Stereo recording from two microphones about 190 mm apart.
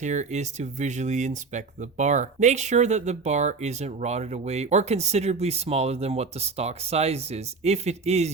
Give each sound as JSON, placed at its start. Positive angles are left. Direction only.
{"t": 0.0, "sound": "speech", "side_deg": -40}